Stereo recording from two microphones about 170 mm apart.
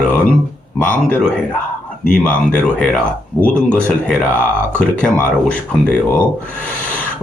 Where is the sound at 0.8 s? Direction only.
10° left (ahead or behind).